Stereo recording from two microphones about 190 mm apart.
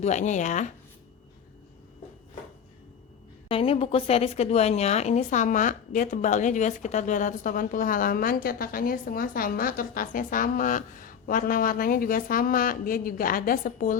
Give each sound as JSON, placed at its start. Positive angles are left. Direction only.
{"t": 0.0, "sound": "speech", "side_deg": 40}
{"t": 3.5, "sound": "a woman's voice", "side_deg": 30}